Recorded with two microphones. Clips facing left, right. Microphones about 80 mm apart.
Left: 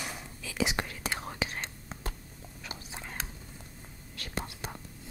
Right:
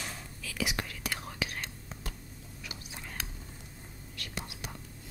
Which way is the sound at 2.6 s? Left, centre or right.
Left.